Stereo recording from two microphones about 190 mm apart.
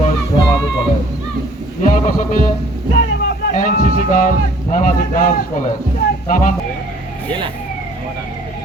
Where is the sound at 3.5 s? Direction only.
45° left (ahead or behind).